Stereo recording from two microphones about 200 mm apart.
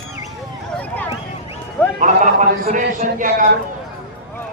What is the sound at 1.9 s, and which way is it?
A man's voice, 40° right (ahead or behind).